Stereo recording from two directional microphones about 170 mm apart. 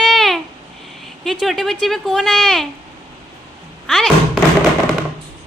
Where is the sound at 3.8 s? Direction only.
Centre (ahead or behind).